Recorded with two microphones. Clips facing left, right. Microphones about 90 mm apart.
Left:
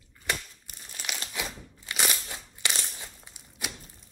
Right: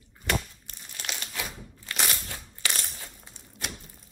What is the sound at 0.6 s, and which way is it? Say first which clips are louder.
Crumpling: right 1 dB; 5° left (ahead or behind).